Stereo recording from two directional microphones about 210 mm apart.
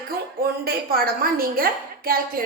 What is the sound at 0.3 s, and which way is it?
A woman's voice, 45° right (ahead or behind).